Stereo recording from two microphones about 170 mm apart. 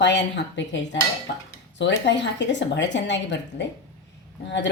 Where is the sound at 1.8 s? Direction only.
90° left.